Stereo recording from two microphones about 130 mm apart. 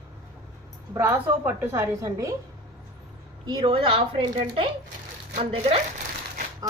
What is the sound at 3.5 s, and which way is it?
Speech, 40° right (ahead or behind).